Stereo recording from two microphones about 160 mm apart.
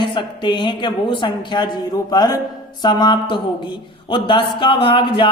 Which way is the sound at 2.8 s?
30° left (ahead or behind).